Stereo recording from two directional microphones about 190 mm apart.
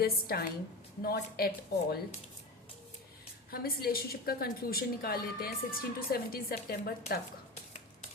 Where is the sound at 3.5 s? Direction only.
50° left (ahead or behind).